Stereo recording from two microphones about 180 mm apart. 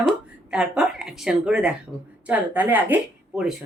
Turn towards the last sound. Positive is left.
turn(degrees=-5)  # may be behind; listen again after turning